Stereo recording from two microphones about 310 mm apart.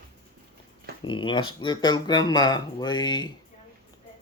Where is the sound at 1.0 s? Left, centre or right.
Centre.